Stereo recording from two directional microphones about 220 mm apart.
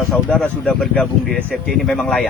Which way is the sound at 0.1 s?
5° left (ahead or behind).